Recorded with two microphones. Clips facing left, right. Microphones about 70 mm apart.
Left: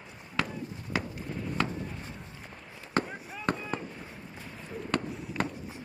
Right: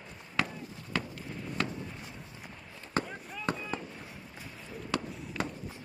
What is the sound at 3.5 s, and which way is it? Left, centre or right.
Fireworks, left.